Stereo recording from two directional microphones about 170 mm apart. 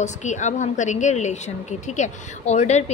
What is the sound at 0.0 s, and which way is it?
A woman's voice, 45° left (ahead or behind).